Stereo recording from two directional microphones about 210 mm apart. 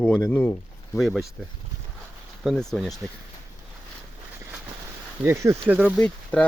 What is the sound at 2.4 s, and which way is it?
Speech, centre (ahead or behind).